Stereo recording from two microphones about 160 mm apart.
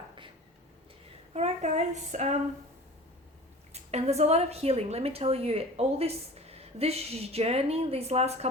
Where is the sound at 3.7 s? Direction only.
40° right (ahead or behind).